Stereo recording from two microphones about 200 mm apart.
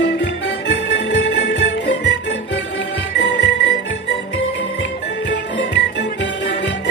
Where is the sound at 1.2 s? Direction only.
65° left (ahead or behind).